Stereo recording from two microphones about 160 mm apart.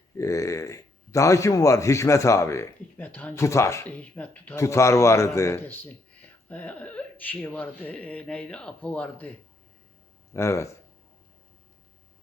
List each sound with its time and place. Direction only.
0.2 s a man's voice: 20° left (ahead or behind)
10.3 s a man's voice: 15° left (ahead or behind)